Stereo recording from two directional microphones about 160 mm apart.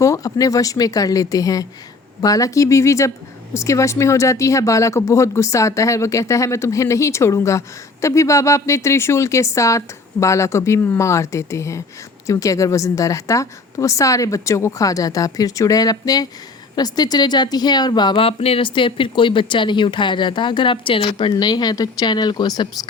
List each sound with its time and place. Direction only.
0.0 s a woman's voice: 20° left (ahead or behind)